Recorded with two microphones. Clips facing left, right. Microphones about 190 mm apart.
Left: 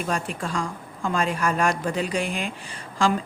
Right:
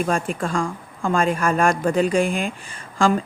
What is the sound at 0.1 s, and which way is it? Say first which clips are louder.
Speech: right 5 dB; 50° right (ahead or behind).